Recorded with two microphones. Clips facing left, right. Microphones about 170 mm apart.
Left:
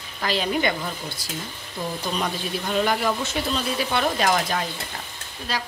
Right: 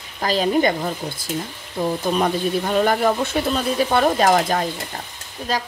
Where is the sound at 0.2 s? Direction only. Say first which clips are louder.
Right 5 dB; 40° right (ahead or behind).